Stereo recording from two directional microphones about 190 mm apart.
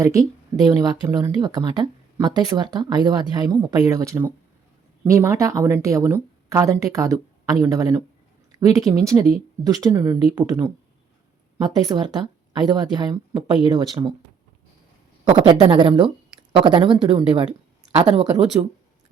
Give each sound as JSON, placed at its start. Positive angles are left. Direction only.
{"t": 0.0, "sound": "speech", "side_deg": -15}
{"t": 15.2, "sound": "speech", "side_deg": -25}